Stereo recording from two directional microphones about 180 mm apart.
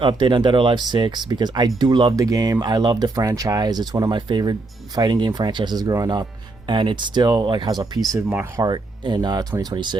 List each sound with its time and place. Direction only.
0.0 s speech: 25° right (ahead or behind)
8.6 s speech: 25° right (ahead or behind)